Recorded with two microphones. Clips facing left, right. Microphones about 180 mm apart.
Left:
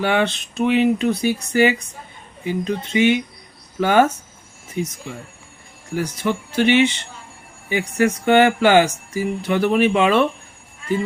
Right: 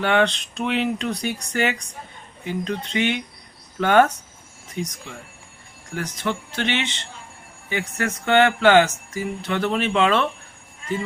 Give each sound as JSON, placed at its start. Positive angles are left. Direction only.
{"t": 0.0, "sound": "speech", "side_deg": 5}
{"t": 5.9, "sound": "speech", "side_deg": 10}